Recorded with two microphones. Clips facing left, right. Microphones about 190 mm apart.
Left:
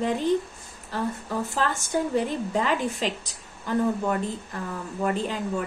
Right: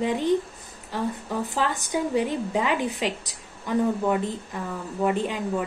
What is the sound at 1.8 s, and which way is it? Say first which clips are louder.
A woman's voice: even; 10° right (ahead or behind).